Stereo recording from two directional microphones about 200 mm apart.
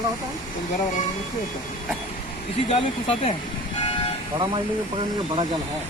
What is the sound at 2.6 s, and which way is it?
Speech, 30° left (ahead or behind).